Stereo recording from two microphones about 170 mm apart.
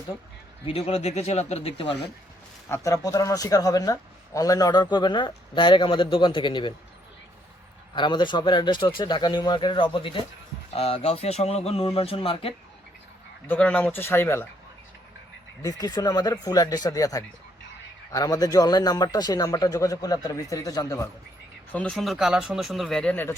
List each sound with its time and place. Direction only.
0.6 s speech: 35° left (ahead or behind)
2.6 s a man's voice: 15° left (ahead or behind)
7.9 s a man's voice: 25° left (ahead or behind)
13.5 s speech: 10° left (ahead or behind)
15.6 s a man's voice: 20° left (ahead or behind)
21.7 s speech: 5° left (ahead or behind)